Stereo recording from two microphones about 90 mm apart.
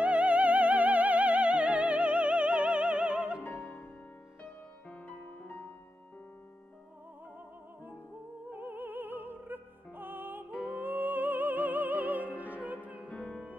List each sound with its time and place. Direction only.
0.0 s music: 15° right (ahead or behind)
3.4 s music: 25° left (ahead or behind)
8.5 s music: 20° right (ahead or behind)
13.0 s music: 10° left (ahead or behind)